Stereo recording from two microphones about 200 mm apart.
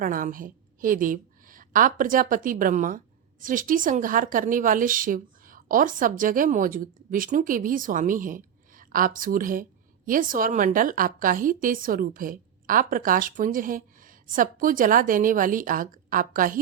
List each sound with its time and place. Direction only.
0.0 s a woman's voice: 45° right (ahead or behind)